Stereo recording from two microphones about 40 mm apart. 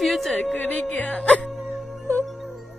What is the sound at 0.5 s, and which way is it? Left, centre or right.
Speech, left.